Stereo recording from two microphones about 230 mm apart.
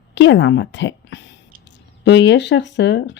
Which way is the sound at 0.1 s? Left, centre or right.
Left.